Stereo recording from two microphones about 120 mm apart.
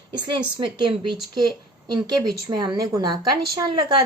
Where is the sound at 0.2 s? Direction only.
40° right (ahead or behind).